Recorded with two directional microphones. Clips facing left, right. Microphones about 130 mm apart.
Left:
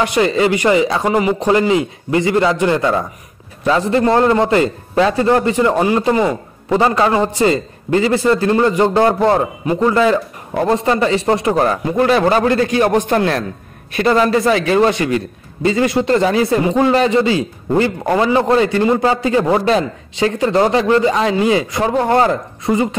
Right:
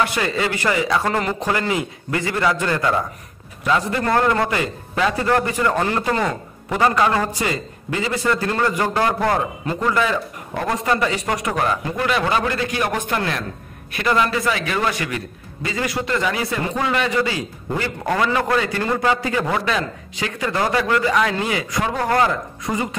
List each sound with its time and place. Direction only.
0.0 s a man's voice: 20° left (ahead or behind)
16.1 s a man's voice: 35° left (ahead or behind)